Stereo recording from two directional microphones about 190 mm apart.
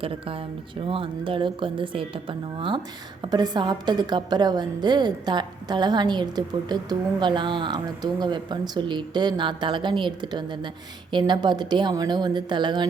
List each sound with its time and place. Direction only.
0.9 s a woman's voice: 25° right (ahead or behind)